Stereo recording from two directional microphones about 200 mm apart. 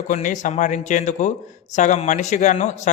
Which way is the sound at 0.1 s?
40° left (ahead or behind).